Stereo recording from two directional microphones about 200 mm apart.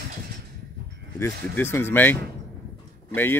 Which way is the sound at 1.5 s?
10° left (ahead or behind).